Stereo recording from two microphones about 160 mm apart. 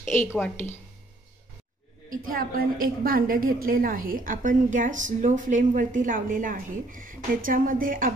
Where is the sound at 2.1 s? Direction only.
60° right (ahead or behind).